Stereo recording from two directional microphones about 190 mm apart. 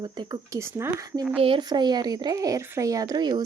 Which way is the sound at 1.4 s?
25° right (ahead or behind).